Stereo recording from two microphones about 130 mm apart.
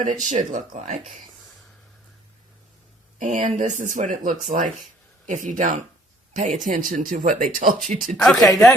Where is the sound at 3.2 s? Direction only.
70° right (ahead or behind).